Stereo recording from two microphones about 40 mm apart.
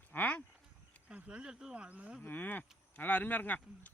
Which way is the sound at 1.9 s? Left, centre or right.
Right.